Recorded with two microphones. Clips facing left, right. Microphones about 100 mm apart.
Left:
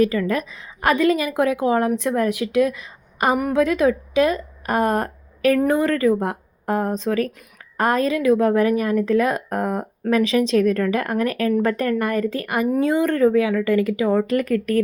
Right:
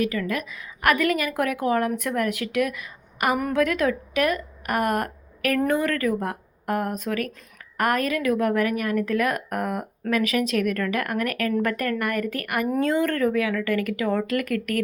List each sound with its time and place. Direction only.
0.0 s a woman's voice: 35° left (ahead or behind)